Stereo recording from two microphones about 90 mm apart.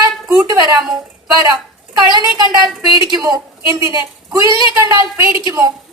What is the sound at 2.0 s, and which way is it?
A woman's voice, 55° right (ahead or behind).